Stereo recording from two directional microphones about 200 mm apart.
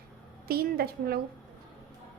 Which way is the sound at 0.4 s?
50° right (ahead or behind).